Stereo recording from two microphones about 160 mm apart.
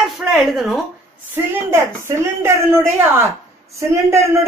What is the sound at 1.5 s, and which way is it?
A woman's voice, 15° right (ahead or behind).